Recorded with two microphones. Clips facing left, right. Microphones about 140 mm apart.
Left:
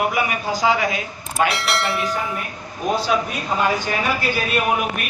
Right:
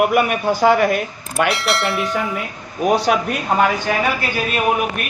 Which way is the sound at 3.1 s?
60° right (ahead or behind).